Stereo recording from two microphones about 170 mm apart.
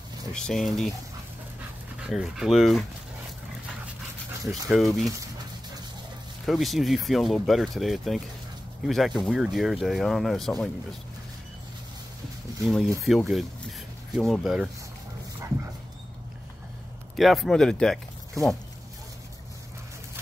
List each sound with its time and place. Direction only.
0.3 s speech: 5° left (ahead or behind)
2.0 s speech: 5° right (ahead or behind)
4.5 s speech: centre (ahead or behind)
6.4 s speech: centre (ahead or behind)
12.6 s speech: centre (ahead or behind)
14.1 s speech: centre (ahead or behind)
17.2 s speech: centre (ahead or behind)